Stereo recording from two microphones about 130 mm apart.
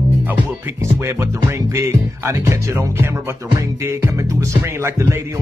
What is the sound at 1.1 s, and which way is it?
Music, 20° right (ahead or behind).